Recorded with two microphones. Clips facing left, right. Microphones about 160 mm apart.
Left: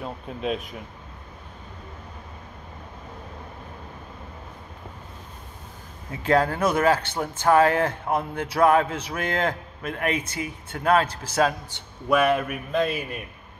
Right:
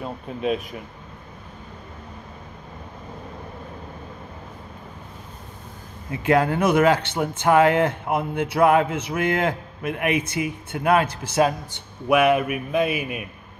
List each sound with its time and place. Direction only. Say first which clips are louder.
0.0 s speech: right 3 dB; centre (ahead or behind)
6.2 s speech: right 2 dB; 15° right (ahead or behind)